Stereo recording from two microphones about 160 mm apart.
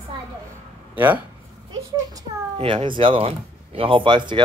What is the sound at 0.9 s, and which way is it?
Speech, 10° right (ahead or behind).